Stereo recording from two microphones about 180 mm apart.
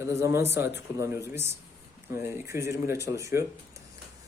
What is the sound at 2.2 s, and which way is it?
A man's voice, 15° right (ahead or behind).